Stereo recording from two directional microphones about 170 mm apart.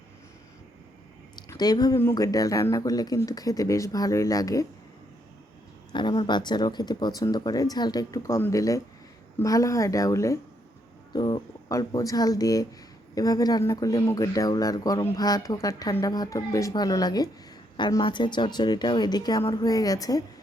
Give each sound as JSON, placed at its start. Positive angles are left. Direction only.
{"t": 1.4, "sound": "speech", "side_deg": 25}
{"t": 5.9, "sound": "speech", "side_deg": 25}